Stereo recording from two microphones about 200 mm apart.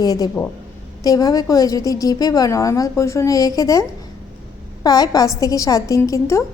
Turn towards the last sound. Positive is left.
turn(degrees=15)  # may be behind; listen again after turning